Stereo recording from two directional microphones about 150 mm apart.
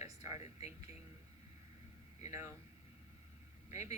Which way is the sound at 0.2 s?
20° right (ahead or behind).